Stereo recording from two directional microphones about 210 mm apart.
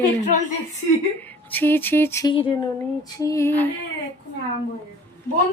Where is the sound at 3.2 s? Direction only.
15° left (ahead or behind).